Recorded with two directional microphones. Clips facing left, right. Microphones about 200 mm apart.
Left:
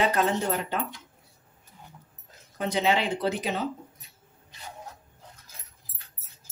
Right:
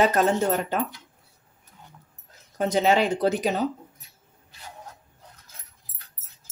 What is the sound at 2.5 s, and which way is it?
Speech, 45° right (ahead or behind).